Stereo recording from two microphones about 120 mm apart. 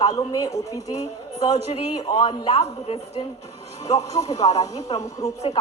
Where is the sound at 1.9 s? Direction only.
45° left (ahead or behind).